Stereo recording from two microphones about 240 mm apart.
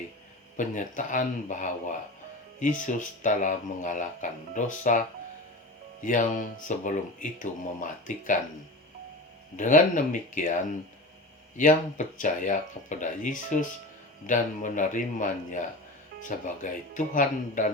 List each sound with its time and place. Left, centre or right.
0.5 s speech: left
9.6 s speech: left